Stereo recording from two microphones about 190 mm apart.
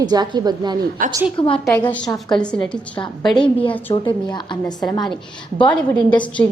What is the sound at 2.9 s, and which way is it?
A woman's voice, 25° left (ahead or behind).